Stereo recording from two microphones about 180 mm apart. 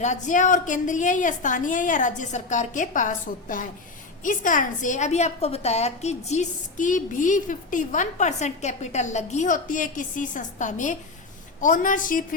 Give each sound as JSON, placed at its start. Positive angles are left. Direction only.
{"t": 0.0, "sound": "a woman's voice", "side_deg": 40}
{"t": 4.2, "sound": "a woman's voice", "side_deg": 45}